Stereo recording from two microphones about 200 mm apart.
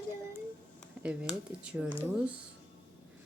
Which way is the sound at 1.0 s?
5° right (ahead or behind).